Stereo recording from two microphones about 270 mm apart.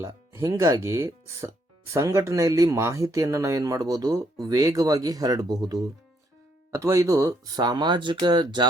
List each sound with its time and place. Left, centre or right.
0.0 s speech: centre